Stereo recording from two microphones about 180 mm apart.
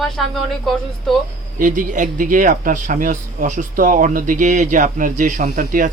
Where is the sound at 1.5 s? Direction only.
45° right (ahead or behind).